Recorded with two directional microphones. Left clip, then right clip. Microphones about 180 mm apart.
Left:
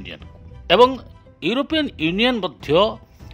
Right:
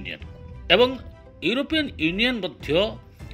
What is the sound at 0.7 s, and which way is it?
A man's voice, 35° left (ahead or behind).